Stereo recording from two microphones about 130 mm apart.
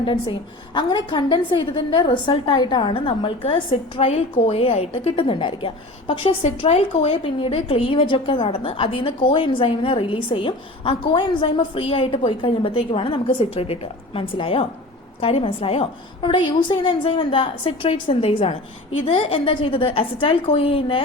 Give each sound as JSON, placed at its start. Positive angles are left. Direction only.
{"t": 0.0, "sound": "a woman's voice", "side_deg": 40}
{"t": 7.3, "sound": "a woman's voice", "side_deg": 45}